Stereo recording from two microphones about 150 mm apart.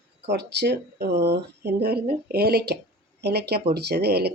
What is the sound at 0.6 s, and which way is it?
Speech, 90° right.